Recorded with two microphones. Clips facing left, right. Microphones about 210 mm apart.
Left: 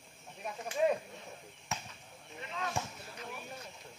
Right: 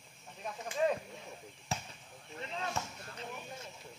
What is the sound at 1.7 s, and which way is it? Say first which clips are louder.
Basketball bounce: right 2 dB; 30° right (ahead or behind).